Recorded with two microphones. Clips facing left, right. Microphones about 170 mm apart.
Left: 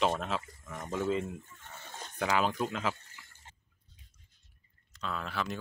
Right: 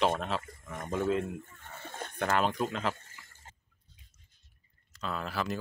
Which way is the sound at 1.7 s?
55° right (ahead or behind).